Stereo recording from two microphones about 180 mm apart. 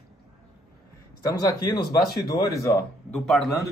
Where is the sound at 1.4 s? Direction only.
20° left (ahead or behind).